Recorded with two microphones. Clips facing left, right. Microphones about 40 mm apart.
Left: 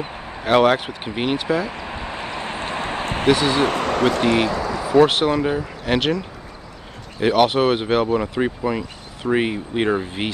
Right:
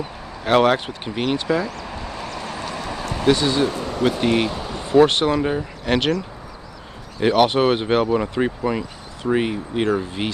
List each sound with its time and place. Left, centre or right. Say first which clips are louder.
0.0 s a sound: left 1 dB; left
0.5 s speech: left 1 dB; centre; by 4.4 s left
4.9 s speech: even; centre
7.2 s speech: even; centre
9.2 s speech: left 1 dB; centre